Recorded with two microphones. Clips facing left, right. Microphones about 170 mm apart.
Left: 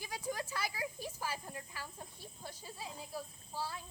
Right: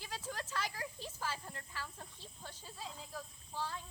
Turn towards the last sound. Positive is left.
turn(degrees=10)  # may be behind; listen again after turning